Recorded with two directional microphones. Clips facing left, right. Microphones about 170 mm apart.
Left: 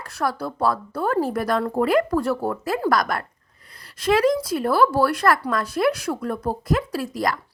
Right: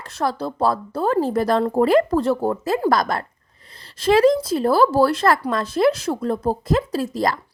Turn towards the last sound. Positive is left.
turn(degrees=-25)  # may be behind; listen again after turning